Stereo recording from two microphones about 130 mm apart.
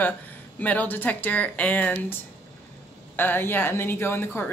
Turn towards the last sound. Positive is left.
turn(degrees=15)  # may be behind; listen again after turning